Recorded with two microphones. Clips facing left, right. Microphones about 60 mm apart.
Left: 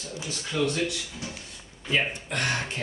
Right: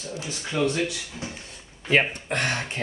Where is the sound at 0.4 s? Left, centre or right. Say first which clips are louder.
Right 2 dB; right.